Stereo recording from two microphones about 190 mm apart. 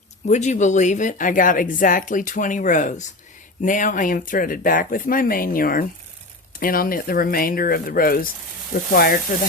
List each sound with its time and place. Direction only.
0.3 s a woman's voice: 40° left (ahead or behind)